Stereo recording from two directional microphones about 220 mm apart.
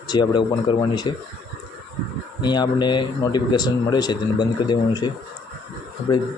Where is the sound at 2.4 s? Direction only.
20° left (ahead or behind).